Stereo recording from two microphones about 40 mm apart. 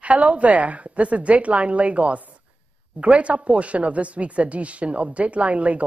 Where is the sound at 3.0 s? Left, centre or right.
Right.